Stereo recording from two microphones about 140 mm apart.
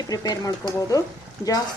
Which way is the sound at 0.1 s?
25° left (ahead or behind).